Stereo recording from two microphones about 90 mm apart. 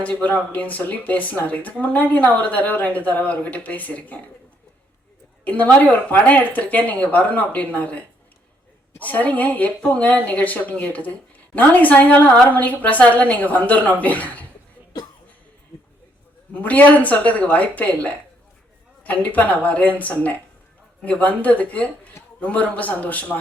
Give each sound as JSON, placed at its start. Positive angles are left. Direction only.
{"t": 0.0, "sound": "speech", "side_deg": 15}
{"t": 5.5, "sound": "speech", "side_deg": 15}
{"t": 16.6, "sound": "speech", "side_deg": 20}